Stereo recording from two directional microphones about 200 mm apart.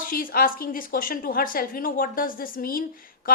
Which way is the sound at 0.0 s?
45° left (ahead or behind).